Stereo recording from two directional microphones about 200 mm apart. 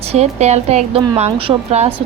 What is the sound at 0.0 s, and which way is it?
Speech, 30° right (ahead or behind).